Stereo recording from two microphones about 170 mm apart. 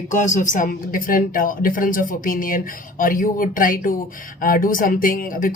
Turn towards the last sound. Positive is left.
turn(degrees=55)  # may be behind; listen again after turning